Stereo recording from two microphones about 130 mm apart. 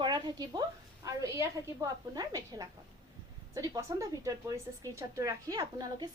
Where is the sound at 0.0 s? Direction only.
35° right (ahead or behind).